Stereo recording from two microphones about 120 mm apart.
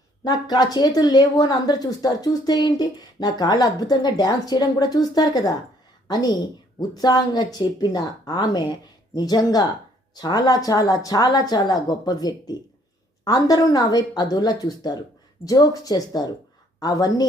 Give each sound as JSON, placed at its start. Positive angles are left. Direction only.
{"t": 0.3, "sound": "speech", "side_deg": 35}
{"t": 6.7, "sound": "speech", "side_deg": 35}